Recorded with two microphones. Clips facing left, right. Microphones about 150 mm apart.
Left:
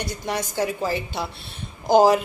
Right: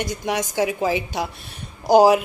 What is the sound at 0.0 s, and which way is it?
Speech, 15° right (ahead or behind).